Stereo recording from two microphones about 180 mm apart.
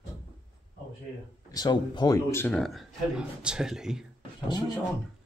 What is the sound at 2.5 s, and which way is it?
Speech, centre (ahead or behind).